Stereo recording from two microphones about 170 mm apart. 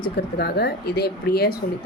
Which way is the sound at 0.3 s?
70° left (ahead or behind).